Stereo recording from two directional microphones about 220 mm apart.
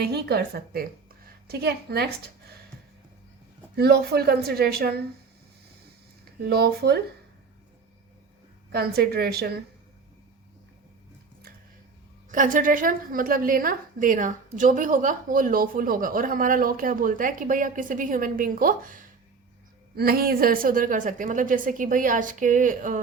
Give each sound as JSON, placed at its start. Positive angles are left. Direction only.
{"t": 0.0, "sound": "a woman's voice", "side_deg": -45}
{"t": 3.8, "sound": "a woman's voice", "side_deg": -45}
{"t": 6.4, "sound": "a woman's voice", "side_deg": -45}
{"t": 8.7, "sound": "a woman's voice", "side_deg": -45}
{"t": 12.3, "sound": "a woman's voice", "side_deg": -35}
{"t": 20.0, "sound": "a woman's voice", "side_deg": -45}